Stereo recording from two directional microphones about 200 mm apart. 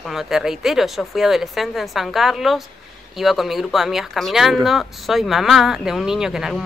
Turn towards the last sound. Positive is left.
turn(degrees=-5)  # may be behind; listen again after turning